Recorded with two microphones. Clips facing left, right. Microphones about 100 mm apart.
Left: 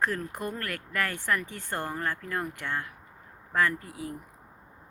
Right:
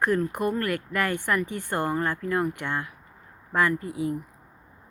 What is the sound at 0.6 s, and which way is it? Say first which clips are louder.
Speech: right 5 dB; 15° right (ahead or behind).